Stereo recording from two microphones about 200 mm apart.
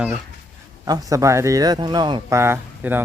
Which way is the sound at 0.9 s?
20° right (ahead or behind).